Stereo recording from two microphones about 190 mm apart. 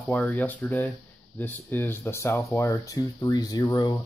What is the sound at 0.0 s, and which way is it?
Speech, 10° left (ahead or behind).